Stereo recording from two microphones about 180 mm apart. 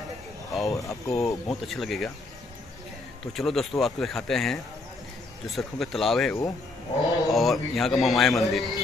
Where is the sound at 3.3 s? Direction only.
Centre (ahead or behind).